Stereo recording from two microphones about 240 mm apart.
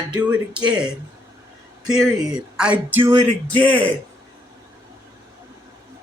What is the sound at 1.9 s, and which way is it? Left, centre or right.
Speech, centre.